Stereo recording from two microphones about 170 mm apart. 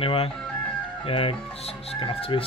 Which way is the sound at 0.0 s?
35° left (ahead or behind).